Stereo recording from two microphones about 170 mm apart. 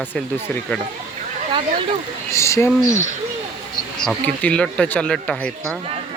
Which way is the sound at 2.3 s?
15° left (ahead or behind).